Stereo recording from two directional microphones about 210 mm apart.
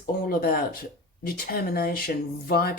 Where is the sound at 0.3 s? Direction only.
45° left (ahead or behind).